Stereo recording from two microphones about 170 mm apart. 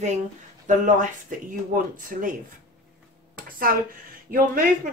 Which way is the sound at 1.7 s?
55° right (ahead or behind).